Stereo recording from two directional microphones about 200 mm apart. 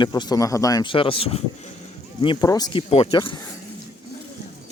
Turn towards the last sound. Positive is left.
turn(degrees=25)  # may be behind; listen again after turning